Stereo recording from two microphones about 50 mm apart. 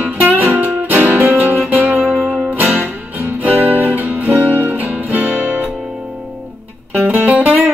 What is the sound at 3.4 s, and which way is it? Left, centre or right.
Music, right.